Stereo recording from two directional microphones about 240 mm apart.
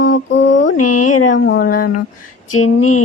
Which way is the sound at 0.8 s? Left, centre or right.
Left.